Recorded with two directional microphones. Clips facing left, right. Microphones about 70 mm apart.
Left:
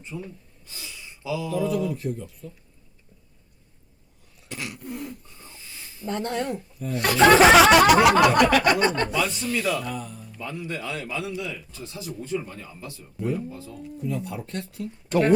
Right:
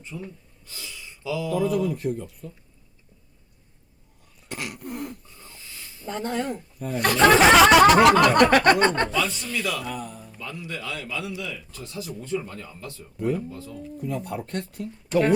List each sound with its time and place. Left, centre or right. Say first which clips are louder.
0.1 s speech: left 1 dB; centre
0.7 s a sound: right 1 dB; left
1.6 s speech: right 2 dB; right
4.4 s throat clearing: right 1 dB; right
5.4 s a sound: even; centre
6.1 s speech: left 1 dB; centre
8.4 s speech: right 2 dB; right
9.0 s speech: left 1 dB; centre
9.9 s speech: even; right
10.4 s a man's voice: left 2 dB; left; by 13.4 s centre
14.0 s speech: even; right